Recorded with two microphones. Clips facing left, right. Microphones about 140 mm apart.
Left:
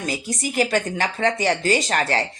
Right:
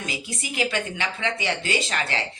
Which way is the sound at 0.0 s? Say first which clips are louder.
Left 6 dB; 40° left (ahead or behind).